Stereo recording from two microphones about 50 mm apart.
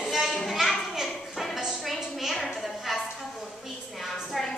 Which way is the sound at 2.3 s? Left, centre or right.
Centre.